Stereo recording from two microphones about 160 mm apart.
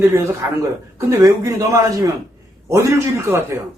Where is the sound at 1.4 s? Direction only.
20° right (ahead or behind).